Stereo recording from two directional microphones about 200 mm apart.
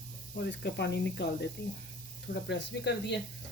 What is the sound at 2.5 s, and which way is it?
Speech, 60° left (ahead or behind).